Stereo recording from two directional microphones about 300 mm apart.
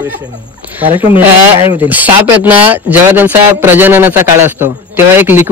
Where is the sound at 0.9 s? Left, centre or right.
Centre.